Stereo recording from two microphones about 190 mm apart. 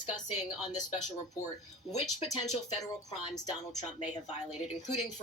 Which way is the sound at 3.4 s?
35° left (ahead or behind).